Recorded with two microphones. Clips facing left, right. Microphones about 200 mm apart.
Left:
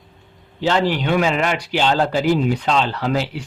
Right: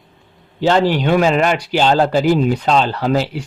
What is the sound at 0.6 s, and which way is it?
A man's voice, 45° right (ahead or behind).